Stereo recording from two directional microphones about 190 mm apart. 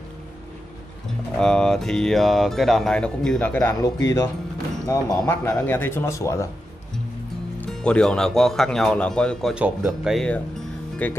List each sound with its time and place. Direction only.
1.4 s speech: 5° left (ahead or behind)
7.8 s speech: 5° left (ahead or behind)